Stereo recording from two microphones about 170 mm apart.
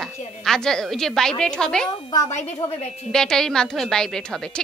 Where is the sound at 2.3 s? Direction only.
45° left (ahead or behind).